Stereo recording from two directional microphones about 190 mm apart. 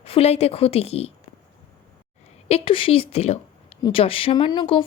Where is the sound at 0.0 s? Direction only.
30° left (ahead or behind).